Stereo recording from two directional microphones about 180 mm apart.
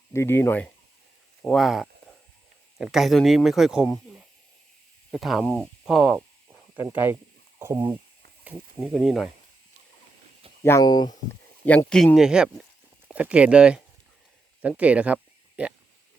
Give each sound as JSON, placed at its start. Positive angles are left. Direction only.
{"t": 0.1, "sound": "speech", "side_deg": 15}
{"t": 1.4, "sound": "speech", "side_deg": 0}
{"t": 8.4, "sound": "speech", "side_deg": 0}
{"t": 10.6, "sound": "speech", "side_deg": 15}
{"t": 11.6, "sound": "speech", "side_deg": 10}